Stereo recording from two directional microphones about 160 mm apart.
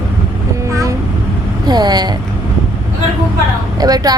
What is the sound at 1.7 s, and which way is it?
Speech, 25° right (ahead or behind).